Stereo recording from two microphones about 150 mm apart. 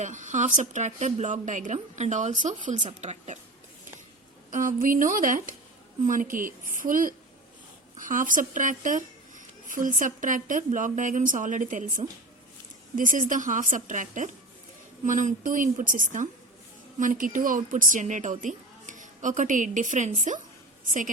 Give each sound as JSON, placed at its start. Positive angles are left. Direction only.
{"t": 0.0, "sound": "speech", "side_deg": -55}
{"t": 4.5, "sound": "a woman's voice", "side_deg": -65}